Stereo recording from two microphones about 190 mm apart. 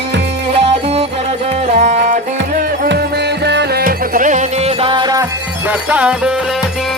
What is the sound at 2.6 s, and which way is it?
Music, 55° right (ahead or behind).